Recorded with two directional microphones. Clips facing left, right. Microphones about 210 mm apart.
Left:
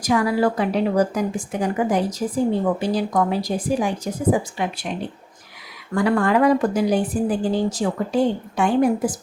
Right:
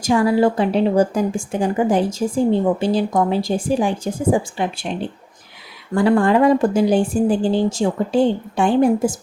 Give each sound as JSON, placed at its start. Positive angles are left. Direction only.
{"t": 0.0, "sound": "a woman's voice", "side_deg": -30}